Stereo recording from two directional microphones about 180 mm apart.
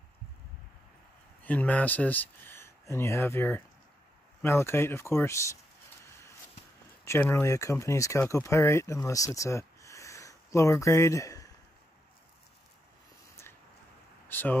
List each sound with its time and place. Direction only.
1.4 s speech: 10° left (ahead or behind)
7.1 s speech: 15° left (ahead or behind)
14.3 s a sound: 10° left (ahead or behind)